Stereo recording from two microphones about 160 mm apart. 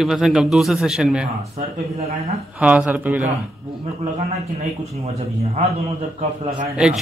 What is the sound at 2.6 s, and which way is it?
Speech, 5° right (ahead or behind).